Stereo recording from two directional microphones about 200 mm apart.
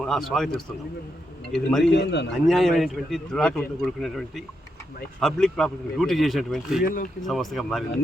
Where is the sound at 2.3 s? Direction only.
Centre (ahead or behind).